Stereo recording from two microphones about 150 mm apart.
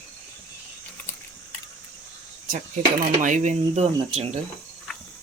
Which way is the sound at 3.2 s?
55° right (ahead or behind).